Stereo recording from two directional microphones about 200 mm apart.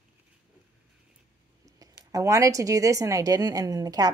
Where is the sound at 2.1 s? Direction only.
15° right (ahead or behind).